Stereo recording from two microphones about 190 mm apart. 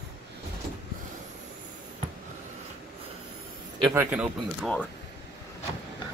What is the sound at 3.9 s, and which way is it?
Speech, 5° right (ahead or behind).